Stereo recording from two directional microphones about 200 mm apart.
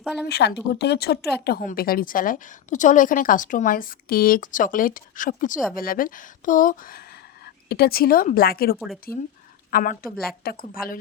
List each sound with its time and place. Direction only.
0.0 s speech: 5° right (ahead or behind)
0.3 s a woman's voice: 55° left (ahead or behind)